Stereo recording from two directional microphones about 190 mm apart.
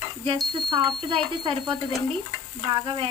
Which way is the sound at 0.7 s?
25° right (ahead or behind).